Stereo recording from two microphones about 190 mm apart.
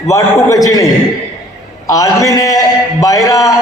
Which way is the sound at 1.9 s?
20° left (ahead or behind).